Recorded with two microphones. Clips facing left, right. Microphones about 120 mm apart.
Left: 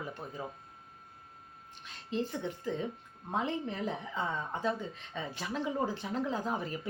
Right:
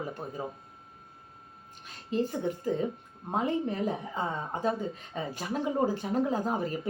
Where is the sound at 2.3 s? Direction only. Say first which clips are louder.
Right 6 dB; 45° right (ahead or behind).